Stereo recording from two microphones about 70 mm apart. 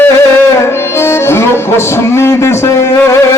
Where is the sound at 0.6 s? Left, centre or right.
Left.